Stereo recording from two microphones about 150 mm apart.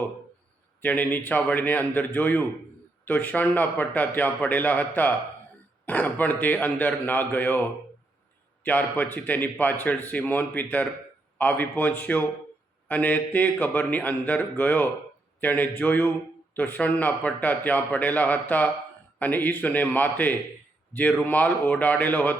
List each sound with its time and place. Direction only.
0.8 s a man's voice: 10° left (ahead or behind)
8.6 s a man's voice: 10° left (ahead or behind)